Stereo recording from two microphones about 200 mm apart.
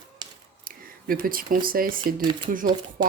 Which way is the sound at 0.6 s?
45° right (ahead or behind).